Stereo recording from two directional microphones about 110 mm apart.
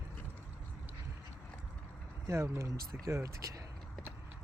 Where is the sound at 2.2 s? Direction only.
25° right (ahead or behind).